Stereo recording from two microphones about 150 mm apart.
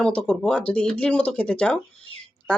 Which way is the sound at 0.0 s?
5° left (ahead or behind).